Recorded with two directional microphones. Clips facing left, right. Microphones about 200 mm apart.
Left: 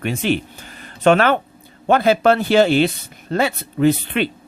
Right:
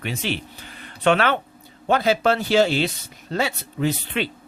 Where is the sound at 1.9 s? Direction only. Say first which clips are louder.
Left 5 dB; 55° left (ahead or behind).